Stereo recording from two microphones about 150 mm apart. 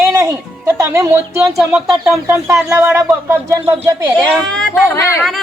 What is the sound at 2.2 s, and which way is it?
Speech, 15° right (ahead or behind).